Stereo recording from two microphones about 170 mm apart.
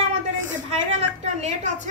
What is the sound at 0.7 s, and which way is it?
Speech, 40° right (ahead or behind).